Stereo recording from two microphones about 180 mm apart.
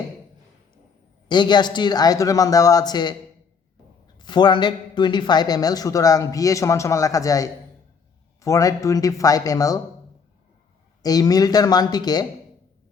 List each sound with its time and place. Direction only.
1.3 s a man's voice: 25° left (ahead or behind)
4.2 s a man's voice: 25° left (ahead or behind)
11.0 s a man's voice: 20° left (ahead or behind)